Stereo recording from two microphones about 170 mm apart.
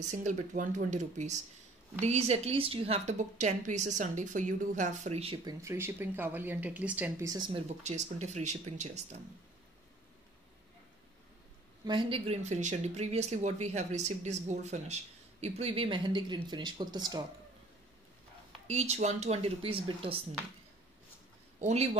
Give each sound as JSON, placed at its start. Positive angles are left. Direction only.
{"t": 0.0, "sound": "a woman's voice", "side_deg": -45}
{"t": 5.4, "sound": "speech", "side_deg": -20}
{"t": 7.2, "sound": "speech", "side_deg": -25}
{"t": 7.8, "sound": "speech", "side_deg": -40}
{"t": 11.8, "sound": "speech", "side_deg": -25}
{"t": 18.7, "sound": "speech", "side_deg": -40}
{"t": 21.5, "sound": "speech", "side_deg": -45}